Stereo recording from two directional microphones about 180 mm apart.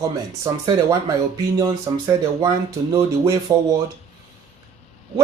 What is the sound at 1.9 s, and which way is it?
Speech, 25° right (ahead or behind).